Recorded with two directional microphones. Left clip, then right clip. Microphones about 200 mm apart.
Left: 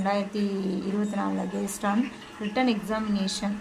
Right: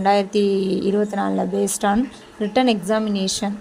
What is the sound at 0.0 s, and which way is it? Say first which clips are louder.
A woman's voice: right 11 dB; 35° right (ahead or behind).